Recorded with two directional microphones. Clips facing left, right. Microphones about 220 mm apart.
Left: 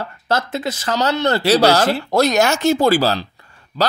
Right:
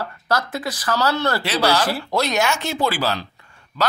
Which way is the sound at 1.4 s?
40° left (ahead or behind).